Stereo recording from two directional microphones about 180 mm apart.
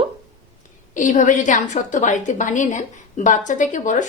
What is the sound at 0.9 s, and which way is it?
A woman's voice, 45° left (ahead or behind).